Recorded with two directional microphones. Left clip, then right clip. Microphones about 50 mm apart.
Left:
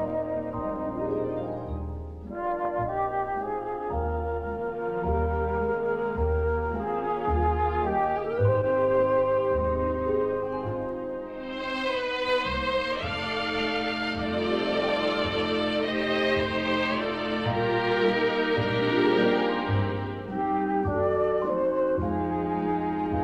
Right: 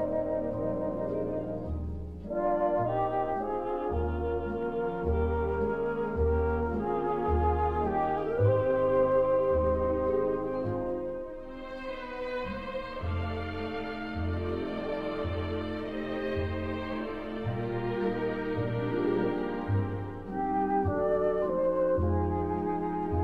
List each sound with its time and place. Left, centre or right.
2.4 s music: centre
7.1 s music: right
8.0 s music: right
8.5 s music: centre
20.4 s music: right